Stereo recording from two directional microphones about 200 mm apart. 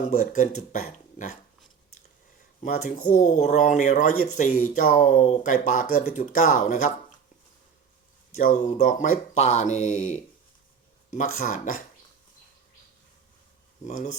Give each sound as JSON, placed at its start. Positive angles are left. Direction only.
{"t": 0.0, "sound": "speech", "side_deg": 35}
{"t": 2.6, "sound": "speech", "side_deg": 40}
{"t": 8.4, "sound": "speech", "side_deg": 40}
{"t": 13.8, "sound": "speech", "side_deg": 40}